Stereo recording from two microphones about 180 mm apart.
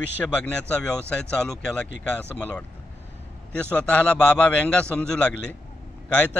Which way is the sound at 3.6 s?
5° left (ahead or behind).